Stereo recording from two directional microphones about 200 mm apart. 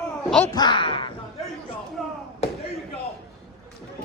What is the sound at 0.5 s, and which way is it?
Speech, 20° left (ahead or behind).